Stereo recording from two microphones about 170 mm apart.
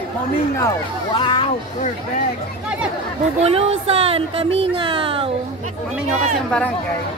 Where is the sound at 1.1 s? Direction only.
30° left (ahead or behind).